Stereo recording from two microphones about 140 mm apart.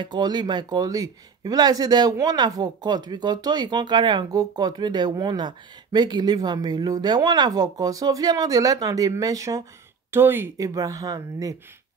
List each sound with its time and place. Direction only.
0.0 s speech: 30° right (ahead or behind)